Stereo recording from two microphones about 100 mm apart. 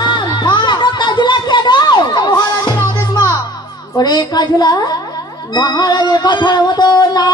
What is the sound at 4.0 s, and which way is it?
Speech, 45° left (ahead or behind).